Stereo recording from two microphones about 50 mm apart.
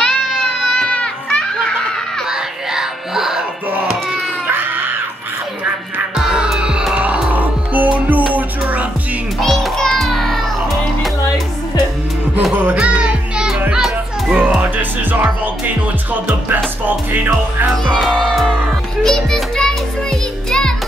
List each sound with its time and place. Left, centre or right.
0.0 s music: centre
2.2 s music: centre
4.5 s music: right
6.1 s music: centre
7.0 s music: right
9.4 s music: centre
12.7 s music: centre
14.4 s music: right
19.0 s music: centre